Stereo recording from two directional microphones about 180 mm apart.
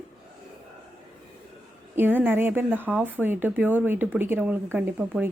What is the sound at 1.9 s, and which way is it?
A woman's voice, 10° right (ahead or behind).